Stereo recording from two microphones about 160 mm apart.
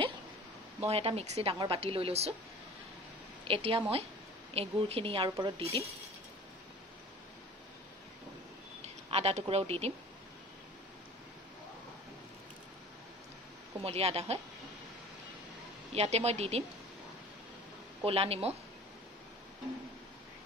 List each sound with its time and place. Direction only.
0.7 s speech: 40° right (ahead or behind)
3.4 s speech: 35° right (ahead or behind)
8.8 s speech: 40° right (ahead or behind)
13.7 s speech: 40° right (ahead or behind)
15.9 s speech: 40° right (ahead or behind)
18.0 s speech: 35° right (ahead or behind)